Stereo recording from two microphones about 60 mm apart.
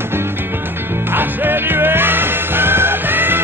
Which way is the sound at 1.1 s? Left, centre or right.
Right.